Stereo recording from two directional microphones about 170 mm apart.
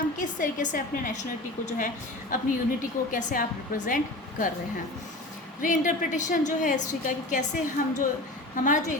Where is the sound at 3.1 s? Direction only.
50° left (ahead or behind).